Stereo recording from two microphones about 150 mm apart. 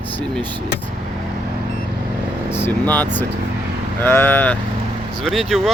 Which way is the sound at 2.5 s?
15° left (ahead or behind).